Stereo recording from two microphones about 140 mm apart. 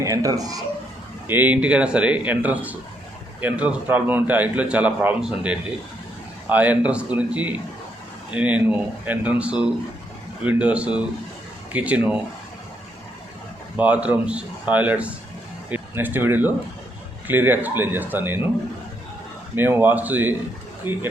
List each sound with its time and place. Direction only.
0.0 s speech: 25° right (ahead or behind)
1.3 s a man's voice: 10° right (ahead or behind)
13.7 s a man's voice: 10° right (ahead or behind)
19.5 s a man's voice: 15° right (ahead or behind)